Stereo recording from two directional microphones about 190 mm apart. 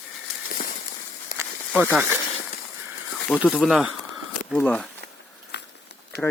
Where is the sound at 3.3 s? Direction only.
5° right (ahead or behind).